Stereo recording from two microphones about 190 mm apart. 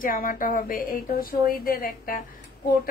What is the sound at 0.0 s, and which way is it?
A woman's voice, 45° left (ahead or behind).